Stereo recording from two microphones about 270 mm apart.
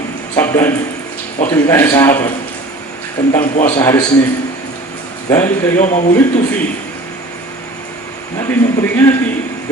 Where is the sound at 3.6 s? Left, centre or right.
Centre.